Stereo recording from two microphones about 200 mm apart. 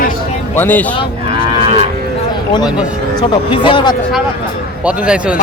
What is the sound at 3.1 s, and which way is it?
Speech, 25° left (ahead or behind).